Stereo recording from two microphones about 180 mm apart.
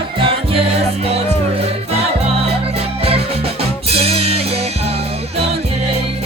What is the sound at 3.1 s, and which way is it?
Music, 35° right (ahead or behind).